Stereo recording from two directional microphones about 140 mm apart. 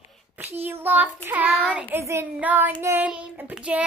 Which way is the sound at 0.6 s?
15° right (ahead or behind).